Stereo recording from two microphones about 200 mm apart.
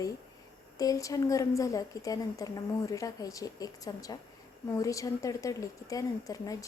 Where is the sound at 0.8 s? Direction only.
15° left (ahead or behind).